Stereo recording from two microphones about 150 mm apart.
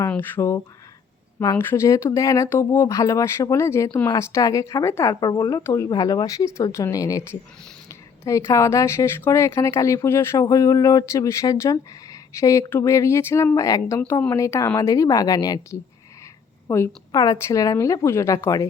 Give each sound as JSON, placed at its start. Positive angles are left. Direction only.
{"t": 0.1, "sound": "speech", "side_deg": 15}